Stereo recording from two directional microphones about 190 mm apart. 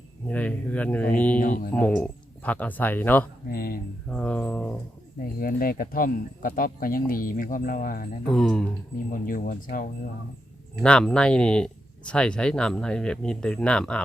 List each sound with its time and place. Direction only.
0.3 s speech: 5° left (ahead or behind)
1.4 s speech: 45° left (ahead or behind)
1.7 s speech: 5° left (ahead or behind)
3.5 s speech: 55° left (ahead or behind)
4.1 s speech: 5° left (ahead or behind)
5.2 s speech: 50° left (ahead or behind)
8.3 s speech: 5° left (ahead or behind)
9.0 s speech: 45° left (ahead or behind)
10.8 s speech: 5° left (ahead or behind)